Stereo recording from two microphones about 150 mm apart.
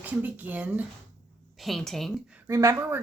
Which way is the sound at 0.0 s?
10° right (ahead or behind).